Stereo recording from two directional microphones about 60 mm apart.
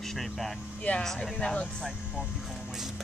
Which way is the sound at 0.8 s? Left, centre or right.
Left.